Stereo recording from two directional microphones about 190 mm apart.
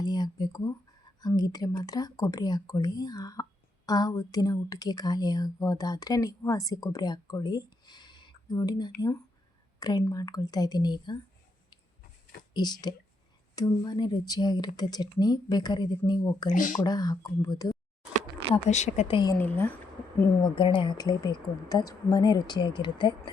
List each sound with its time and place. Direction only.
0.0 s whispering: 20° left (ahead or behind)
1.2 s a woman's voice: 20° left (ahead or behind)
12.5 s a woman's voice: 20° left (ahead or behind)
16.5 s speech: 40° left (ahead or behind)
16.8 s a woman's voice: 20° left (ahead or behind)
18.5 s a woman's voice: 35° left (ahead or behind)
19.4 s speech: 10° left (ahead or behind)
20.4 s a woman's voice: 25° left (ahead or behind)